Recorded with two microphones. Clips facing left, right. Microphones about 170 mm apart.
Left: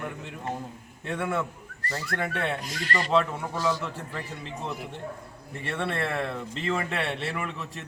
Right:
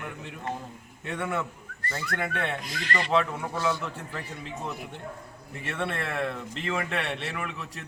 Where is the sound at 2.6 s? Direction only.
40° left (ahead or behind).